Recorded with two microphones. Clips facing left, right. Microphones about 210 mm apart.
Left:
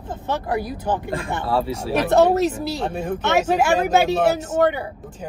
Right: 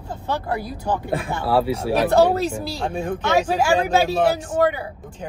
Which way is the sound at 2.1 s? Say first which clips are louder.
Left 1 dB; 25° left (ahead or behind).